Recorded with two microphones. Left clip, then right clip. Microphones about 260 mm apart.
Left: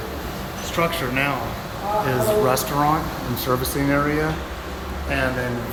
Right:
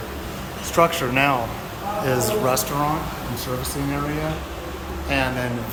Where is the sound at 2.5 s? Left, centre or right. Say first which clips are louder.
Left 2 dB; centre.